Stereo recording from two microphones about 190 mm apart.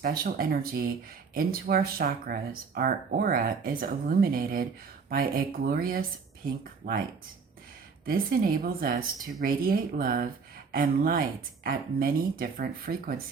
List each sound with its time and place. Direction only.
0.0 s speech: 50° right (ahead or behind)
8.0 s speech: 50° right (ahead or behind)